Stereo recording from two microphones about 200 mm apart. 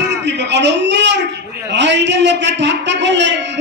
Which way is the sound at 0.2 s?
60° right (ahead or behind).